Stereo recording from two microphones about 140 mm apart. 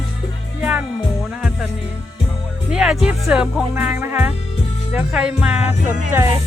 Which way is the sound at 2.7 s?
5° right (ahead or behind).